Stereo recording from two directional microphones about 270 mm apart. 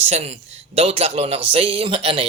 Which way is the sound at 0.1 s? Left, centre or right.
Right.